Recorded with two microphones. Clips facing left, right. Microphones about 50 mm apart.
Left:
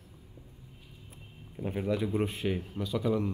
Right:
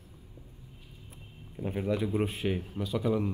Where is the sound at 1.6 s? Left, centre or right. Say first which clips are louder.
Even; centre.